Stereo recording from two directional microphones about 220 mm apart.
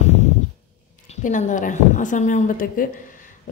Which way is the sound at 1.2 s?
35° left (ahead or behind).